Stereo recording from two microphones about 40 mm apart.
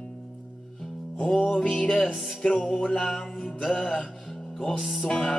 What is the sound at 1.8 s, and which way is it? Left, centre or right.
Music, left.